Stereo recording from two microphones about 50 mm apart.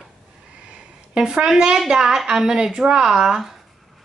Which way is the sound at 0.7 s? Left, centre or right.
Centre.